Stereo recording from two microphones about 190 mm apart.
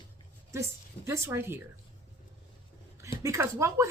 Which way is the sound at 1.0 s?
15° right (ahead or behind).